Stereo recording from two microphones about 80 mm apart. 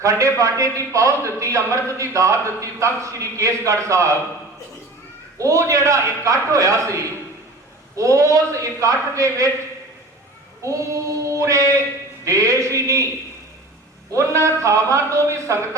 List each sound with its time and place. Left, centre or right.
0.0 s a man's voice: right
5.4 s a man's voice: right
10.6 s a man's voice: right
14.1 s a man's voice: right